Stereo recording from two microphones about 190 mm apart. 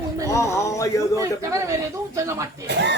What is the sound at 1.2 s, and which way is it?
A man's voice, 15° right (ahead or behind).